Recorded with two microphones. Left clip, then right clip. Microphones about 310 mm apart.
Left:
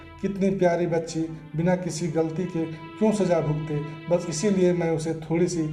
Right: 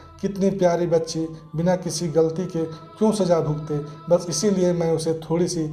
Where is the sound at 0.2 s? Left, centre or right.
Right.